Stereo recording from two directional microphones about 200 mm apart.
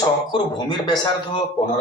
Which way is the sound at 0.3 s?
20° left (ahead or behind).